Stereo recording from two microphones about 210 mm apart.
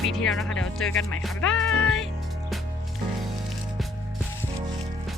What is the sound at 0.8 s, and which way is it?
Speech, 70° left (ahead or behind).